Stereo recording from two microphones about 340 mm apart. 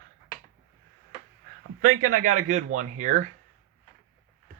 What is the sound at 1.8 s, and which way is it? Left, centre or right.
Speech, right.